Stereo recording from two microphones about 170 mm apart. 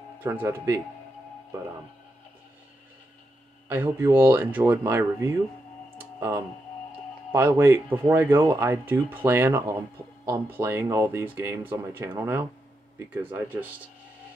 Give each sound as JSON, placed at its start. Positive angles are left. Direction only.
{"t": 0.2, "sound": "speech", "side_deg": -10}
{"t": 3.6, "sound": "speech", "side_deg": -10}